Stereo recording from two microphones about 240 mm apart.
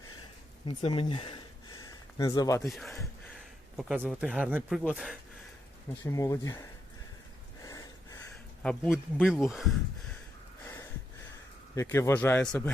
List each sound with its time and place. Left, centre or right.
0.6 s a sound: left
2.6 s speech: centre
6.0 s speech: centre
7.6 s a sound: centre
8.6 s speech: centre
11.7 s speech: centre